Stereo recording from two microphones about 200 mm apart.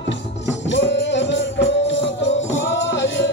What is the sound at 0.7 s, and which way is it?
Music, 65° left (ahead or behind).